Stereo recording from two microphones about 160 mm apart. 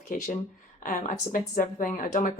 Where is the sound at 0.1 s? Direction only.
55° left (ahead or behind).